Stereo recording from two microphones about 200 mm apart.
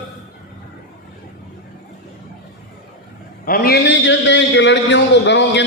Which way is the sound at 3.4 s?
45° left (ahead or behind).